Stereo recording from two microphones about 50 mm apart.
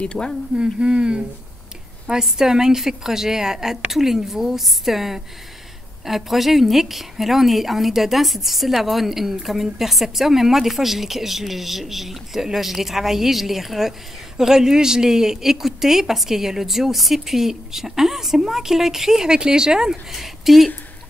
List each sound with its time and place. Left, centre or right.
0.0 s speech: centre
0.6 s humming: centre
2.0 s a woman's voice: centre